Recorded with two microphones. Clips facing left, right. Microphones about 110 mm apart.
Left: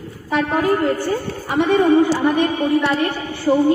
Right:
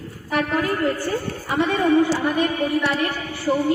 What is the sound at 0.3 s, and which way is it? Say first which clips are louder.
A woman's voice: left 4 dB; 25° left (ahead or behind).